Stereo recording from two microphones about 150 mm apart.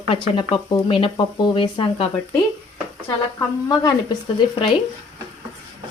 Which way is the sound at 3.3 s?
25° left (ahead or behind).